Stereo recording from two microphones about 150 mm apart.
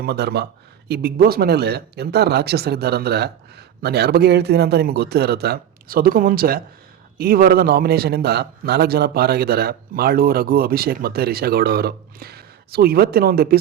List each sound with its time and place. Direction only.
0.0 s a man's voice: 90° right
7.2 s a man's voice: 90° right